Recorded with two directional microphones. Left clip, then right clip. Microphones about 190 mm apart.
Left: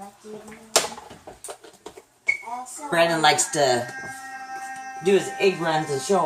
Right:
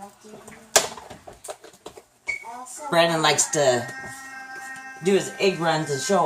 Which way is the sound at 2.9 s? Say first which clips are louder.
Left 1 dB; 5° right (ahead or behind).